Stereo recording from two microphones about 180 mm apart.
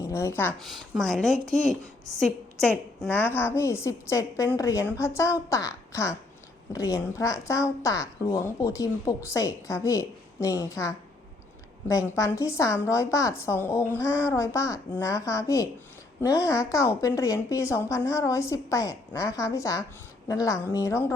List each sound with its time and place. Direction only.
0.0 s a woman's voice: 15° left (ahead or behind)
0.6 s a woman's voice: centre (ahead or behind)
14.0 s child singing: 10° right (ahead or behind)
14.3 s a woman's voice: 15° left (ahead or behind)